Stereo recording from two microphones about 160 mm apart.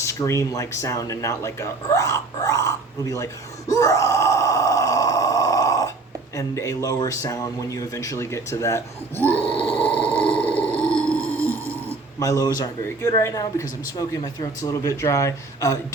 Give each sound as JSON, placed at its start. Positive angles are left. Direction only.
{"t": 0.0, "sound": "speech", "side_deg": 20}
{"t": 3.7, "sound": "groan", "side_deg": 20}
{"t": 6.3, "sound": "speech", "side_deg": 20}
{"t": 9.6, "sound": "grunt", "side_deg": 35}
{"t": 10.2, "sound": "burping", "side_deg": 10}
{"t": 12.2, "sound": "speech", "side_deg": 20}